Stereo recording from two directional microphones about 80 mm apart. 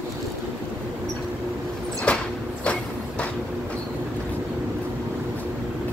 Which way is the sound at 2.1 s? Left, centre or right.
Centre.